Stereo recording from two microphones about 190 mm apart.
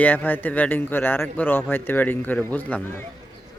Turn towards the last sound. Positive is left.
turn(degrees=10)  # may be behind; listen again after turning